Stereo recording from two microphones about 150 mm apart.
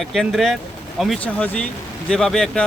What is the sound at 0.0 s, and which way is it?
A man's voice, centre (ahead or behind).